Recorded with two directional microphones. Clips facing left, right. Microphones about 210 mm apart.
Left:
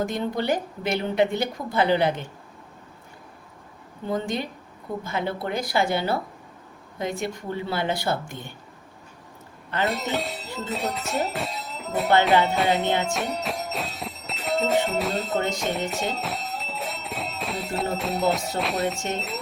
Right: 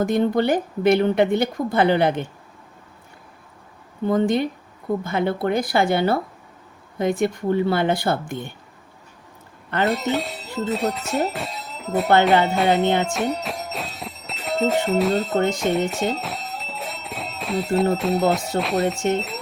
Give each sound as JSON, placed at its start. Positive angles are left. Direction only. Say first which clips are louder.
{"t": 0.0, "sound": "speech", "louder": "right 7 dB", "side_deg": -55}
{"t": 4.1, "sound": "speech", "louder": "right 8 dB", "side_deg": -55}
{"t": 9.8, "sound": "speech", "louder": "right 4 dB", "side_deg": 0}
{"t": 12.2, "sound": "music", "louder": "right 3 dB", "side_deg": 0}
{"t": 13.1, "sound": "speech", "louder": "right 4 dB", "side_deg": 0}